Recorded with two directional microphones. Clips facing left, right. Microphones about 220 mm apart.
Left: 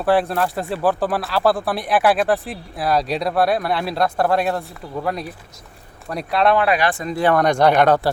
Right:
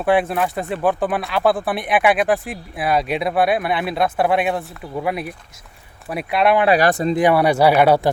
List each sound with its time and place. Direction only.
0.0 s speech: centre (ahead or behind)
6.1 s speech: 5° right (ahead or behind)
6.7 s speech: 40° right (ahead or behind)
7.1 s speech: 15° right (ahead or behind)